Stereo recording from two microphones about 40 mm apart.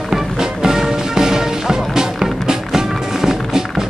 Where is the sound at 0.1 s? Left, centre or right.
Centre.